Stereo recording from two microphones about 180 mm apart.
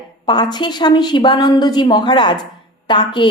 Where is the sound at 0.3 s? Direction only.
25° left (ahead or behind).